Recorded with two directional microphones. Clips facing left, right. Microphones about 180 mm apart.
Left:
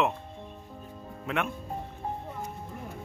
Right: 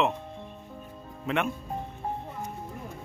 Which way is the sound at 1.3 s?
Centre (ahead or behind).